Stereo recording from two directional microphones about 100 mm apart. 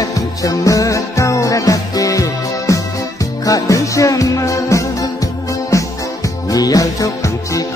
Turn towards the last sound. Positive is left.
turn(degrees=35)  # may be behind; listen again after turning